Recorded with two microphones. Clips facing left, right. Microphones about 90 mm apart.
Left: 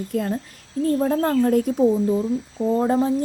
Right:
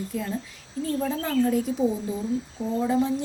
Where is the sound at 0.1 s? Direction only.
55° left (ahead or behind).